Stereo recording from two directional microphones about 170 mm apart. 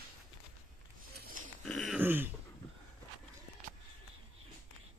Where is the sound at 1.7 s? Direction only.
5° left (ahead or behind).